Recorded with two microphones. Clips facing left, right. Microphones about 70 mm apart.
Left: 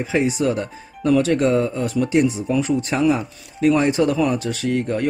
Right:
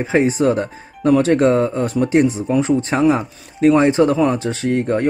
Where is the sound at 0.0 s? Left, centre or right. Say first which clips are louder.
Right 4 dB; right.